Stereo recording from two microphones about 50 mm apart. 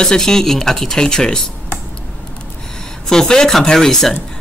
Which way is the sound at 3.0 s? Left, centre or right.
Centre.